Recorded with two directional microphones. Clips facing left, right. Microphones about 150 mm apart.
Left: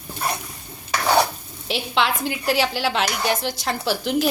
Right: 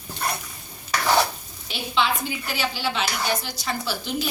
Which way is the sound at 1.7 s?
80° left.